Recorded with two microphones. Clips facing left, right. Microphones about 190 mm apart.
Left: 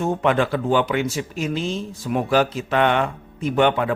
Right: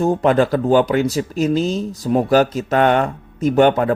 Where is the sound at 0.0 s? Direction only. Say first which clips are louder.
Right 5 dB; 35° right (ahead or behind).